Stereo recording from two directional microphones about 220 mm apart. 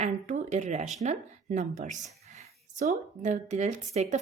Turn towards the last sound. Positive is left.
turn(degrees=-30)  # may be behind; listen again after turning